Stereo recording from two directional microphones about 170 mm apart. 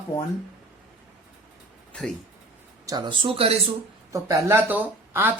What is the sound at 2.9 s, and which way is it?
Speech, 25° right (ahead or behind).